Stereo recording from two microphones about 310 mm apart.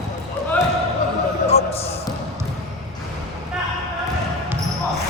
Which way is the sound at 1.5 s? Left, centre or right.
Centre.